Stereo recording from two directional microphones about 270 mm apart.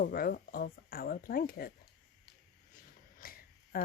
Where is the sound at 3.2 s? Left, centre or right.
Left.